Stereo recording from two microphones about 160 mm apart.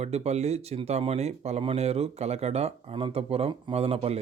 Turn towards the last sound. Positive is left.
turn(degrees=-40)  # may be behind; listen again after turning